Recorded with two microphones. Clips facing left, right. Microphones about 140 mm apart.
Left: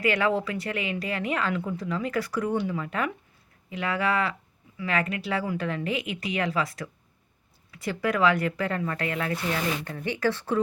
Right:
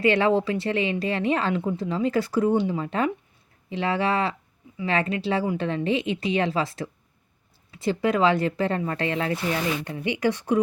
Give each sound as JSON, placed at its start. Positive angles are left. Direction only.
{"t": 0.0, "sound": "a woman's voice", "side_deg": -25}